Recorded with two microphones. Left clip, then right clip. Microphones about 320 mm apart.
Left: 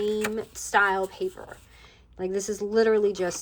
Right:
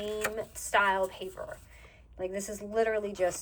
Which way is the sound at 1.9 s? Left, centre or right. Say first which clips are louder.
Left 5 dB; centre.